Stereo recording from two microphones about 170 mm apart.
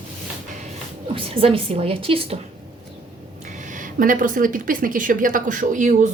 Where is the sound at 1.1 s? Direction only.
35° right (ahead or behind).